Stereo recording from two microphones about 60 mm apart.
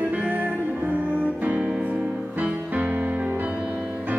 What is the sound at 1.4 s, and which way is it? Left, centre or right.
Music, right.